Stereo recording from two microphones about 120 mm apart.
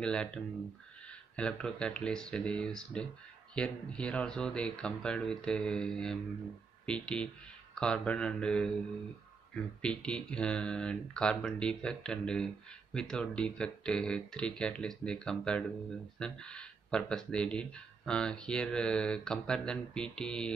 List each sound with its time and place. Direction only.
0.0 s speech: 5° left (ahead or behind)
9.8 s speech: 10° left (ahead or behind)